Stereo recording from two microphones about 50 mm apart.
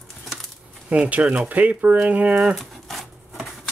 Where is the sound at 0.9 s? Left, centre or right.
Right.